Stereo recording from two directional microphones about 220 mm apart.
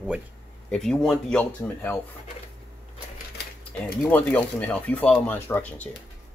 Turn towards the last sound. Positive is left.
turn(degrees=10)  # may be behind; listen again after turning